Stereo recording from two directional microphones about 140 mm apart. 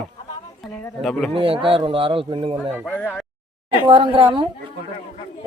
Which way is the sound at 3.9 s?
40° right (ahead or behind).